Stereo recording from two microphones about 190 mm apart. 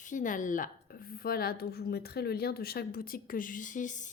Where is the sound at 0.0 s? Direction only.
40° left (ahead or behind).